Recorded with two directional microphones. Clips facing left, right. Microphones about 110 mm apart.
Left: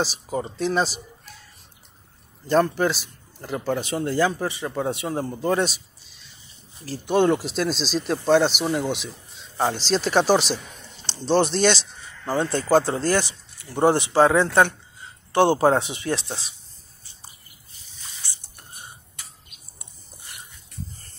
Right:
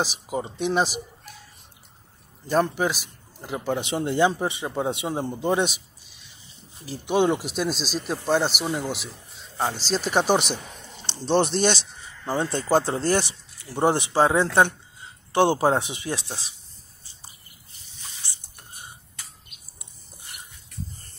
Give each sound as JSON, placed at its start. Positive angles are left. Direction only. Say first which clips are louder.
{"t": 0.0, "sound": "a man's voice", "louder": "left 1 dB", "side_deg": -15}
{"t": 2.4, "sound": "a man's voice", "louder": "left 3 dB", "side_deg": -10}